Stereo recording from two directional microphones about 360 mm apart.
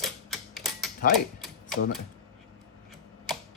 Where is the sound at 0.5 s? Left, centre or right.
Centre.